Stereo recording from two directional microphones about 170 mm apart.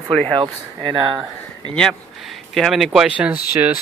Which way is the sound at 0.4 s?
30° right (ahead or behind).